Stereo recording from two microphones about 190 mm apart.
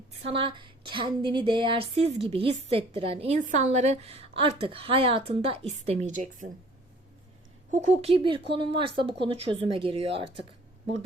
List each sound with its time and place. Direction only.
0.2 s speech: 30° right (ahead or behind)
8.1 s speech: 25° right (ahead or behind)